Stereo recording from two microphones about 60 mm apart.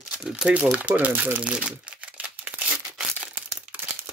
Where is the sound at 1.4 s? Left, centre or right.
Centre.